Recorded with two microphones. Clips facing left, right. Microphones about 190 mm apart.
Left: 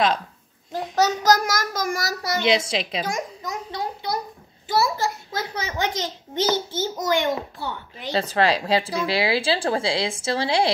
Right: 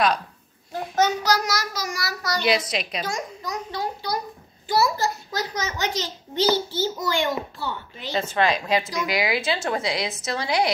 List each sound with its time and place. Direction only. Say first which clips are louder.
0.9 s child singing: left 2 dB; 40° left (ahead or behind)
2.2 s a child's voice: left 1 dB; 25° left (ahead or behind)
8.1 s a child's voice: left 2 dB; 35° left (ahead or behind)